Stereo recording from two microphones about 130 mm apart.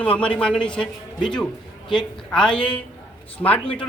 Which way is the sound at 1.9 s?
5° left (ahead or behind).